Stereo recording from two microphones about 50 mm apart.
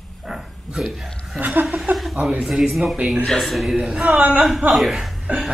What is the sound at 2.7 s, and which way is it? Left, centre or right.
Speech, centre.